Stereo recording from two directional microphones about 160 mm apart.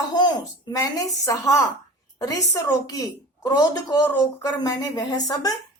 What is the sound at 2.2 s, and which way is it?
A woman's voice, 20° left (ahead or behind).